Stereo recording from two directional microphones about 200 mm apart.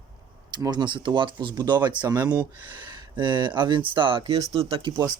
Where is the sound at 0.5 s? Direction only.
20° right (ahead or behind).